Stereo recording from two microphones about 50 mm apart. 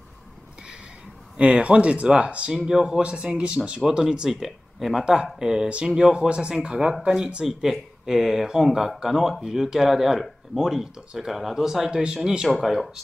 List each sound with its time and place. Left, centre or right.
1.3 s speech: right; by 5.0 s centre
5.0 s speech: centre
5.7 s speech: right
5.9 s speech: centre
7.4 s speech: centre
12.4 s speech: centre